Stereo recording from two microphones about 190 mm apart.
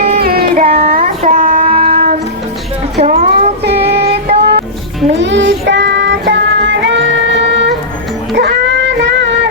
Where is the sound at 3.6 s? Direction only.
60° right (ahead or behind).